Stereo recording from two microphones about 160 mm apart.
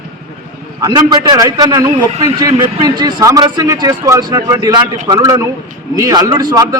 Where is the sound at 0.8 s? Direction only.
25° right (ahead or behind).